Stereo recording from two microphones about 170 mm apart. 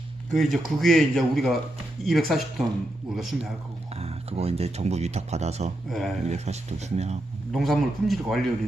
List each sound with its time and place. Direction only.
0.3 s a man's voice: centre (ahead or behind)
3.9 s speech: 35° right (ahead or behind)
5.9 s a man's voice: centre (ahead or behind)
6.2 s speech: 40° right (ahead or behind)
7.5 s a man's voice: centre (ahead or behind)